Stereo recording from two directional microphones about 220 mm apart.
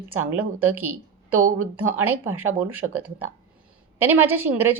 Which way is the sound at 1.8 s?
10° right (ahead or behind).